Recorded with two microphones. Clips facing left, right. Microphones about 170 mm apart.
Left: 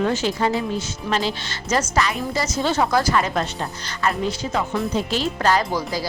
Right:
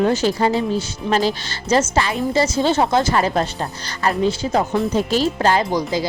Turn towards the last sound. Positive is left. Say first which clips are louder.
# right 4 dB
turn(degrees=-20)  # may be behind; listen again after turning